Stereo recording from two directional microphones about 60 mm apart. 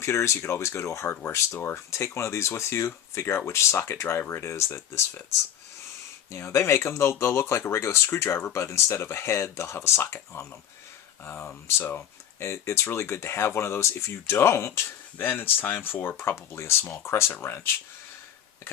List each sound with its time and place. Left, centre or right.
0.0 s speech: left
6.3 s speech: left
11.4 s speech: left
12.4 s speech: left